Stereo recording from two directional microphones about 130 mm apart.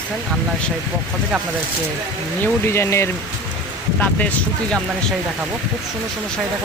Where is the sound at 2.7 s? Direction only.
20° left (ahead or behind).